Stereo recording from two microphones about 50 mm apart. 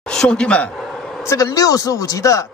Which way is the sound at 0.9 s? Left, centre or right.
Centre.